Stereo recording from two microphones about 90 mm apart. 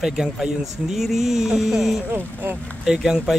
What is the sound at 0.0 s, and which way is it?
Speech, 5° right (ahead or behind).